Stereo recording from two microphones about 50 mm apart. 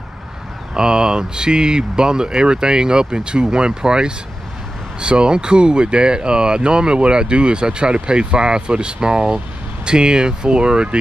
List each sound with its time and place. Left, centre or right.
0.7 s speech: centre